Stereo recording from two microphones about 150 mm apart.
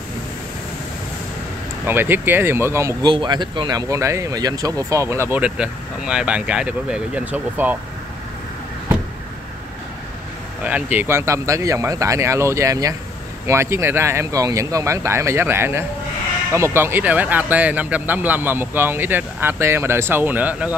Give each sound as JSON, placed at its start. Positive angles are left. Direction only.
{"t": 1.9, "sound": "speech", "side_deg": -15}
{"t": 3.1, "sound": "speech", "side_deg": -30}
{"t": 10.6, "sound": "speech", "side_deg": -10}